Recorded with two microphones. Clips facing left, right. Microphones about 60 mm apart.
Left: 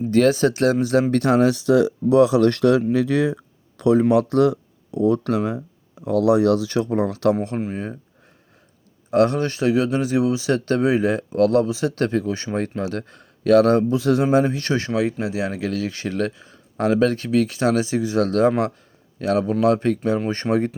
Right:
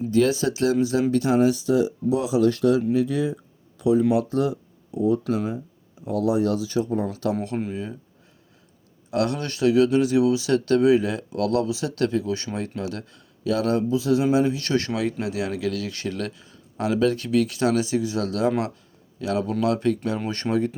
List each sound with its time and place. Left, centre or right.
0.1 s speech: left
1.1 s speech: left
4.1 s speech: left
4.9 s speech: left
6.1 s speech: left
7.7 s speech: left
9.0 s speech: left
13.4 s speech: left
14.3 s speech: left